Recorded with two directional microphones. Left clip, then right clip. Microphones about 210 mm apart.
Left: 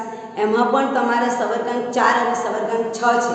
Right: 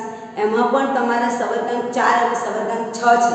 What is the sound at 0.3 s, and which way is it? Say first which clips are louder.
Speech: even; 15° left (ahead or behind).